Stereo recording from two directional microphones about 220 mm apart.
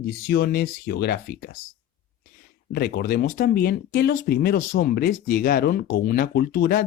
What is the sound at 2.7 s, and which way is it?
Speech, 45° left (ahead or behind).